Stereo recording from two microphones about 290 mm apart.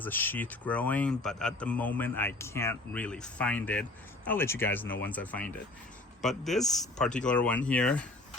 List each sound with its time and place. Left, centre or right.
0.0 s a man's voice: centre